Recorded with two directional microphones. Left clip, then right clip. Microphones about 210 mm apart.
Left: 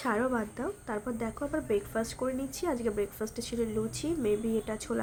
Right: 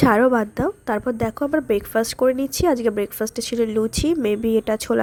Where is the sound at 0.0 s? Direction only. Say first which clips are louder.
Right 14 dB; 40° right (ahead or behind).